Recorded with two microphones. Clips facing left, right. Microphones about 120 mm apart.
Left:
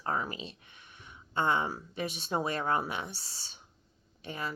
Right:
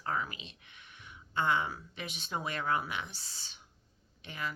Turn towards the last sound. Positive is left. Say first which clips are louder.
# left 2 dB
turn(degrees=35)  # may be behind; listen again after turning